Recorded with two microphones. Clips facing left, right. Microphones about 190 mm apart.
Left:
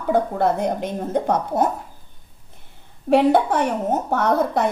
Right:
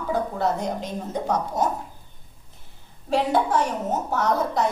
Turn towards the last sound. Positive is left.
turn(degrees=55)  # may be behind; listen again after turning